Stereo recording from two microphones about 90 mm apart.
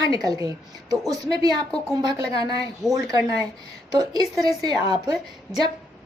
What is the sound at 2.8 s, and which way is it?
A woman's voice, 35° right (ahead or behind).